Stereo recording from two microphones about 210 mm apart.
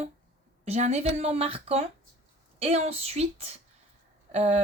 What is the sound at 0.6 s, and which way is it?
Speech, 30° right (ahead or behind).